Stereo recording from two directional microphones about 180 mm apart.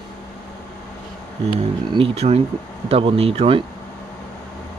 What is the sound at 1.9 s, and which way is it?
Speech, 30° right (ahead or behind).